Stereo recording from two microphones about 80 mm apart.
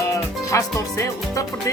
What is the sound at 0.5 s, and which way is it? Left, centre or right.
Music, left.